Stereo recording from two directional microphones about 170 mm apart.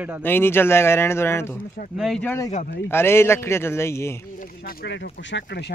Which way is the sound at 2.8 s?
15° left (ahead or behind).